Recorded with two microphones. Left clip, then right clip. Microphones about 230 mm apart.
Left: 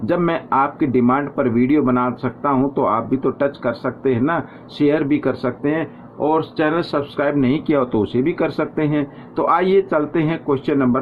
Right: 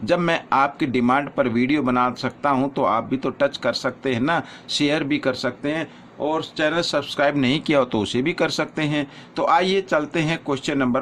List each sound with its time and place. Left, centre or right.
0.0 s speech: right